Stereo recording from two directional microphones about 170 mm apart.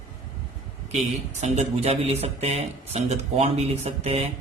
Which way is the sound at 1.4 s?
40° right (ahead or behind).